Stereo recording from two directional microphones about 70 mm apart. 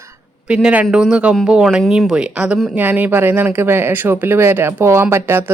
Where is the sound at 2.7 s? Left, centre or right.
Right.